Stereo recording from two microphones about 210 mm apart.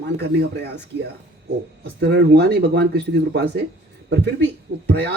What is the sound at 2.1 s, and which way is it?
Speech, 50° right (ahead or behind).